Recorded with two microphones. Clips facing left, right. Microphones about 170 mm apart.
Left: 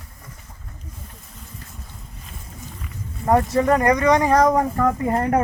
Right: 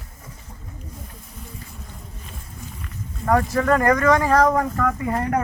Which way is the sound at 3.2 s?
20° left (ahead or behind).